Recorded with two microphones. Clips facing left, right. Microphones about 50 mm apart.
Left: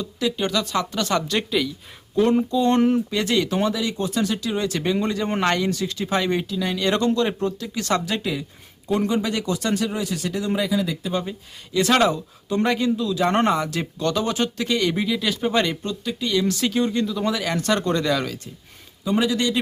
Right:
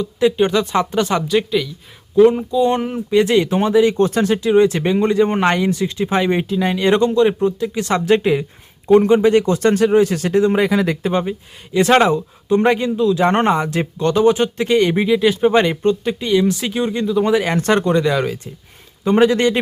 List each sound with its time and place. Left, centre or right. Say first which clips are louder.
0.0 s speech: right 9 dB; right
1.3 s speech: right 5 dB; centre
3.1 s speech: right 8 dB; right
3.9 s speech: right 8 dB; right
10.7 s speech: right 6 dB; right
11.3 s speech: right 7 dB; right
17.8 s speech: right 6 dB; centre
19.0 s speech: right 8 dB; right